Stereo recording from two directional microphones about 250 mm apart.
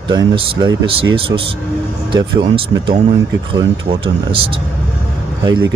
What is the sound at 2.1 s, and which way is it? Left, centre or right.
A man's voice, centre.